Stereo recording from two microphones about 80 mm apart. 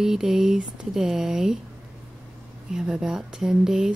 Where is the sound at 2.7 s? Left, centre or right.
Centre.